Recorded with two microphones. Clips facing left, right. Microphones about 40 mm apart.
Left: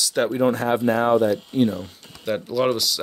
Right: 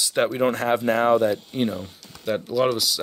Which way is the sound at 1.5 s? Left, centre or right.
Right.